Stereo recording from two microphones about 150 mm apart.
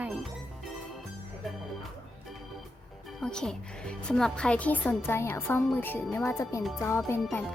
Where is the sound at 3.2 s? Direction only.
5° left (ahead or behind).